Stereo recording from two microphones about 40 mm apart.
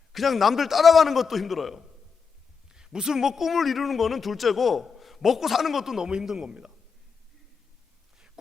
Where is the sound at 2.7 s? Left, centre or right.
Centre.